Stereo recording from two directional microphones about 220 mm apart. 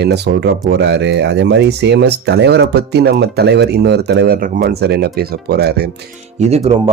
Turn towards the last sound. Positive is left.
turn(degrees=-30)  # may be behind; listen again after turning